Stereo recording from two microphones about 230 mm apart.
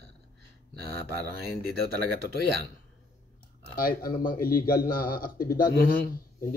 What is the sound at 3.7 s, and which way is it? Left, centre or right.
Speech, left.